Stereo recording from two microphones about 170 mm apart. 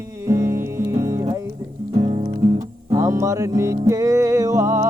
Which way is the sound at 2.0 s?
35° right (ahead or behind).